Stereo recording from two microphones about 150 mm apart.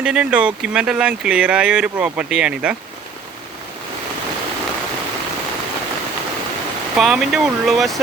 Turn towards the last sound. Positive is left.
turn(degrees=0)  # may be behind; listen again after turning